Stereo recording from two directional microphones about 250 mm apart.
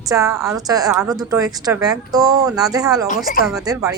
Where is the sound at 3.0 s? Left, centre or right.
Left.